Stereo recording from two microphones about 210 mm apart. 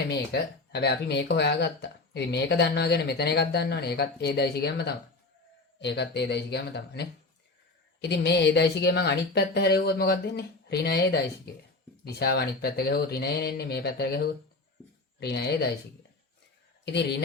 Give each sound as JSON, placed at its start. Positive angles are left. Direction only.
{"t": 0.7, "sound": "speech", "side_deg": 50}
{"t": 16.8, "sound": "speech", "side_deg": 55}